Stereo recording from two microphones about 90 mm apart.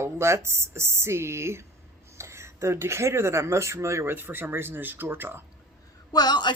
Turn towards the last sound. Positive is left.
turn(degrees=55)  # may be behind; listen again after turning